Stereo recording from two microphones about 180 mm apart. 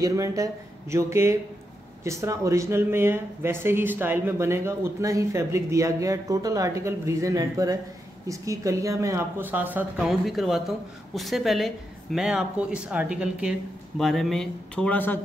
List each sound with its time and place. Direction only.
0.0 s a woman's voice: 15° right (ahead or behind); by 15.1 s 10° left (ahead or behind)